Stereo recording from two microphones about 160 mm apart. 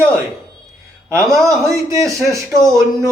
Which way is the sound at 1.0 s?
20° right (ahead or behind).